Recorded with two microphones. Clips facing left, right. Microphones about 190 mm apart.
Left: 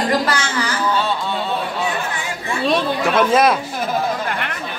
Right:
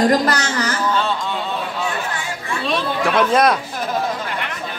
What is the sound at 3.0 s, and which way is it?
Speech, 5° left (ahead or behind).